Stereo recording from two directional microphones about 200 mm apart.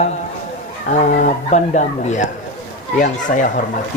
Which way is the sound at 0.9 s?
40° left (ahead or behind).